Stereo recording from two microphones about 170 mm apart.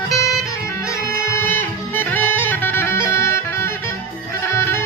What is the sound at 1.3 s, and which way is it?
Music, 10° left (ahead or behind).